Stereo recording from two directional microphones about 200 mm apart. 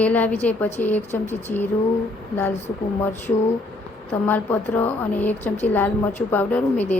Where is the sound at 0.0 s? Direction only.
5° left (ahead or behind).